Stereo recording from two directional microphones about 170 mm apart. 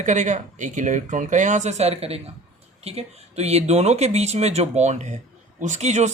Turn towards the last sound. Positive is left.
turn(degrees=-40)  # may be behind; listen again after turning